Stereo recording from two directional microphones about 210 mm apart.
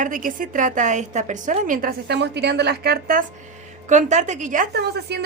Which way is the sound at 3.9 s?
35° right (ahead or behind).